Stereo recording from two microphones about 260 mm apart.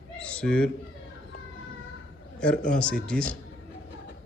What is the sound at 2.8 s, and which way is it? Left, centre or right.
Speech, centre.